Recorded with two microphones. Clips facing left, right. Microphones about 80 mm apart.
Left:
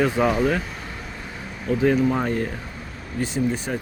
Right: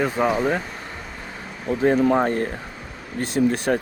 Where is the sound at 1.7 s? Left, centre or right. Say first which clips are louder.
Right 2 dB; right.